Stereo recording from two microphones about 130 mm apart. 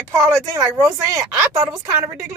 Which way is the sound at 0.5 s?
30° right (ahead or behind).